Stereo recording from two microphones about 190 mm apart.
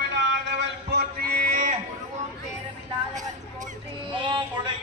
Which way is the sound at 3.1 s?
40° right (ahead or behind).